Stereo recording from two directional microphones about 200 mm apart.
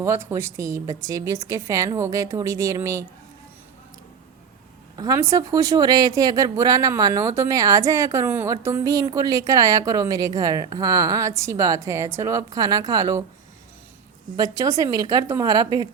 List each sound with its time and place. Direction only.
0.0 s a woman's voice: 15° right (ahead or behind)
4.9 s a woman's voice: 15° right (ahead or behind)
14.3 s a woman's voice: 15° right (ahead or behind)